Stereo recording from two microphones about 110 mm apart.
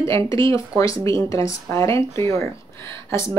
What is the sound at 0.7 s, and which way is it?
Speech, 10° right (ahead or behind).